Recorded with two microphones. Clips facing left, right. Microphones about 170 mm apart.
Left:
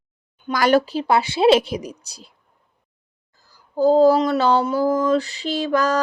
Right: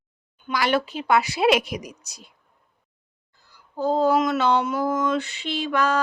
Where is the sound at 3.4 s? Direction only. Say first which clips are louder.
Left 8 dB; 40° left (ahead or behind).